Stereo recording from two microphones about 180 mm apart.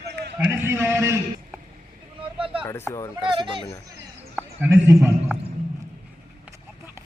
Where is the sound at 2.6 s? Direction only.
15° left (ahead or behind).